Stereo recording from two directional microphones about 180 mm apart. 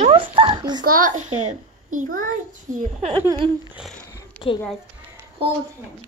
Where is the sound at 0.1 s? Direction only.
30° right (ahead or behind).